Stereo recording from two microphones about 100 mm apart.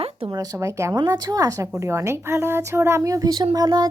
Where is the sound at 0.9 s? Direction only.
45° right (ahead or behind).